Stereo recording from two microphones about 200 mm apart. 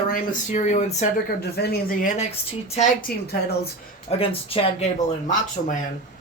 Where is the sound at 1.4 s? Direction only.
50° left (ahead or behind).